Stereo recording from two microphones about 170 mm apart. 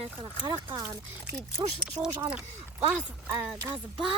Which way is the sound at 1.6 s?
15° right (ahead or behind).